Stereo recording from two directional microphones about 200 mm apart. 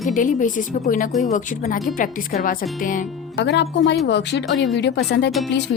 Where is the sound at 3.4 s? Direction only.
60° left (ahead or behind).